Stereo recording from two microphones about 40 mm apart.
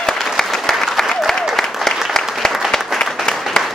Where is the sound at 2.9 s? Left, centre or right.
Centre.